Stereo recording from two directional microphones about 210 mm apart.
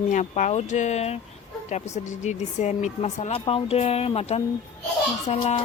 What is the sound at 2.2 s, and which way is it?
Speech, 35° left (ahead or behind).